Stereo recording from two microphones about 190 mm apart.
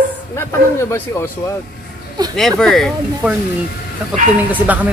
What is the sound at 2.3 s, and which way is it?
Speech, centre (ahead or behind).